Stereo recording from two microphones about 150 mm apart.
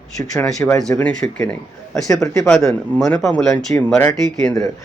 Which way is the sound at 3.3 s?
5° left (ahead or behind).